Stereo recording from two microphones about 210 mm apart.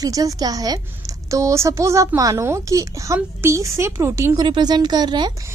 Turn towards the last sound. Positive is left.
turn(degrees=-20)  # may be behind; listen again after turning